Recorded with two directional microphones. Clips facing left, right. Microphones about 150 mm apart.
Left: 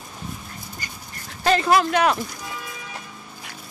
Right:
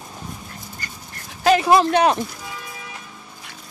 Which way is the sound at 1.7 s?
25° right (ahead or behind).